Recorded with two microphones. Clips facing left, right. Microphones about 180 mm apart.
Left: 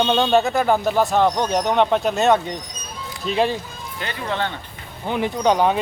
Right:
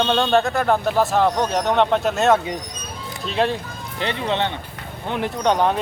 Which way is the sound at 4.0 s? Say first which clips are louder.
Right 3 dB; 25° right (ahead or behind).